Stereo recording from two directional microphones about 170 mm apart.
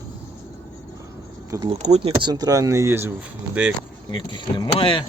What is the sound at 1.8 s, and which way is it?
Speech, 40° right (ahead or behind).